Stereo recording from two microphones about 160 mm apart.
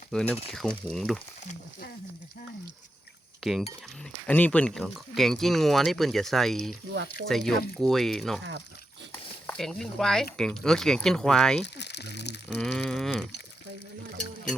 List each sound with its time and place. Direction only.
0.1 s speech: 5° left (ahead or behind)
4.3 s speech: 10° left (ahead or behind)
9.5 s speech: centre (ahead or behind)
11.6 s speech: 90° left
12.5 s speech: 5° left (ahead or behind)